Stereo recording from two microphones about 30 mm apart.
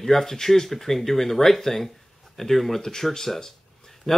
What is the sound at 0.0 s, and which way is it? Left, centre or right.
Speech, centre.